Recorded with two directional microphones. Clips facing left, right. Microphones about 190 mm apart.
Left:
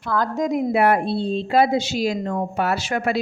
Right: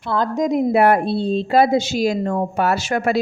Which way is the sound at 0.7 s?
40° right (ahead or behind).